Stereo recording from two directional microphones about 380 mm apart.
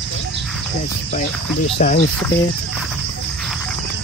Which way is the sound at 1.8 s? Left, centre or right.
Centre.